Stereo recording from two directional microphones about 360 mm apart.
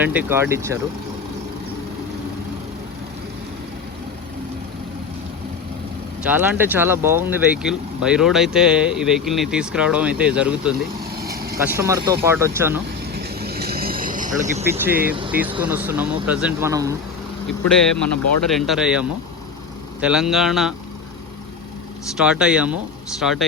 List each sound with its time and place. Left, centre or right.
0.0 s speech: centre
6.2 s speech: centre
11.1 s vehicle: right
11.6 s speech: centre
13.1 s vehicle: right
14.6 s speech: centre
17.6 s speech: left
18.5 s speech: centre
22.2 s speech: centre